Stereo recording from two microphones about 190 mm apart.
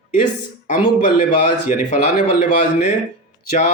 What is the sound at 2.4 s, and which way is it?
A man's voice, 40° left (ahead or behind).